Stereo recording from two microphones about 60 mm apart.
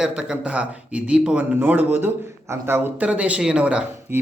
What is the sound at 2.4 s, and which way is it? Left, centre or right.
Speech, right.